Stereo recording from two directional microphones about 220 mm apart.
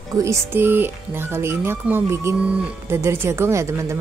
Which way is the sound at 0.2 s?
10° right (ahead or behind).